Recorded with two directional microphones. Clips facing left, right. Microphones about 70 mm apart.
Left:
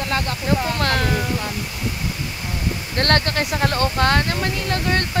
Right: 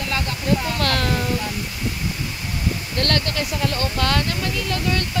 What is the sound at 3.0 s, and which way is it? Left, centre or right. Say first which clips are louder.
Speech: left 4 dB; left.